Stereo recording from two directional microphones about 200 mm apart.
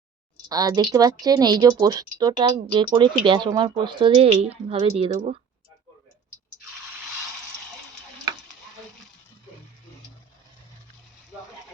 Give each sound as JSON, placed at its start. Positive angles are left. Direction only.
{"t": 0.4, "sound": "speech", "side_deg": -20}